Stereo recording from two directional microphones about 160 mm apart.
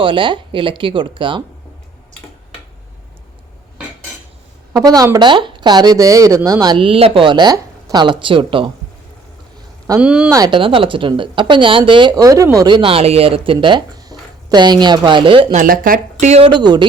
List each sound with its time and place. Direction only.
0.0 s speech: 30° right (ahead or behind)
4.7 s speech: 25° right (ahead or behind)
10.0 s speech: 5° right (ahead or behind)
10.3 s speech: 25° right (ahead or behind)
15.5 s speech: 60° right (ahead or behind)
16.3 s speech: 35° right (ahead or behind)